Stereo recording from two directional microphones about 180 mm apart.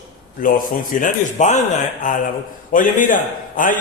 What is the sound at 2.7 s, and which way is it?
A man's voice, 45° left (ahead or behind).